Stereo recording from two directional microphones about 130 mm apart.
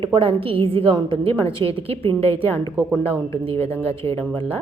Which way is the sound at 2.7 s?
5° right (ahead or behind).